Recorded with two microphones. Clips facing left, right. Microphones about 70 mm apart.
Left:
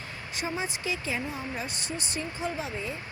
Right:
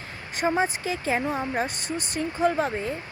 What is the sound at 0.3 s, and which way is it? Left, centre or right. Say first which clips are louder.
Speech: right 9 dB; right.